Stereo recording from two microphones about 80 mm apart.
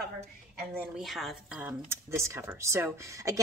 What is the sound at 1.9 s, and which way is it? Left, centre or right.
Speech, right.